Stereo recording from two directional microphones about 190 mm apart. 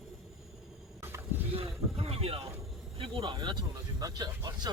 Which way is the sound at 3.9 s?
20° right (ahead or behind).